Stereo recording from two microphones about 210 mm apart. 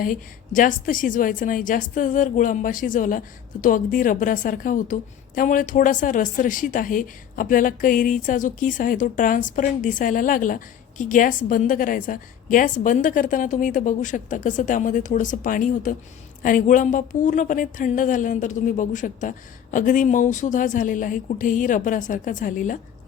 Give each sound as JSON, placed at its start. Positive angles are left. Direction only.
{"t": 0.0, "sound": "a woman's voice", "side_deg": 40}